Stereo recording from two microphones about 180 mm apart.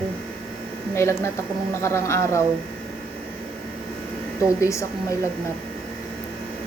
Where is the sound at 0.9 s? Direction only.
15° left (ahead or behind).